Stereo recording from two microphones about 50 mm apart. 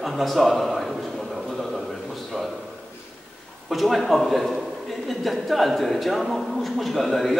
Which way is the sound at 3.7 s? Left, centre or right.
Centre.